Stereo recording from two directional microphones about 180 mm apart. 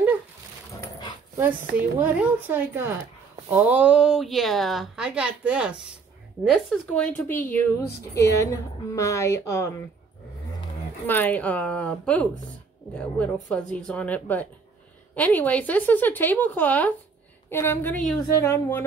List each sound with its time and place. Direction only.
2.0 s a woman's voice: 10° right (ahead or behind); by 9.7 s 15° left (ahead or behind)
11.1 s a woman's voice: 10° left (ahead or behind)